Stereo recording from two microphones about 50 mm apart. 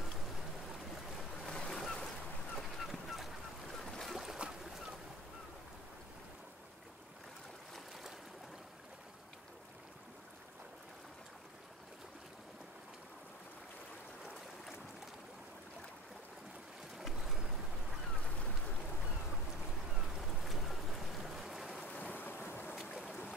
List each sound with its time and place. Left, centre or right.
1.1 s boat: centre
1.7 s a sound: centre
2.5 s fowl: centre
3.7 s boat: centre
4.1 s boat: centre
16.9 s boat: centre
20.0 s boat: centre
21.8 s boat: left